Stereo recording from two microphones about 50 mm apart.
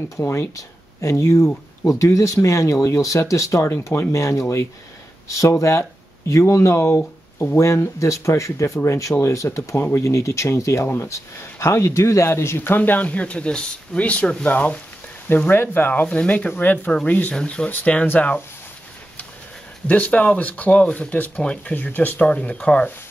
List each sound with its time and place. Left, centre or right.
0.2 s speech: left
5.3 s speech: left
7.5 s speech: left
9.8 s speech: left
10.0 s speech: left
15.2 s speech: left
15.9 s speech: left
17.3 s speech: centre
19.9 s speech: left
21.7 s speech: left